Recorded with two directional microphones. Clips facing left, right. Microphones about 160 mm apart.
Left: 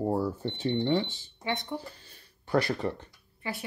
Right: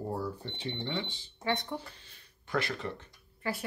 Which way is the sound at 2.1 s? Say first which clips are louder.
Left 6 dB; 40° left (ahead or behind).